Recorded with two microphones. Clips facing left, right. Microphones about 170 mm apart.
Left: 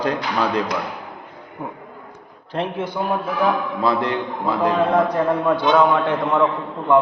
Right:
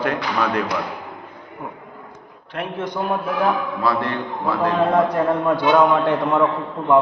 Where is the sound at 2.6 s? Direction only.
30° left (ahead or behind).